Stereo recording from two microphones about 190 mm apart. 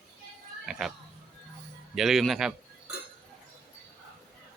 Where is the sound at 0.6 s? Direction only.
Centre (ahead or behind).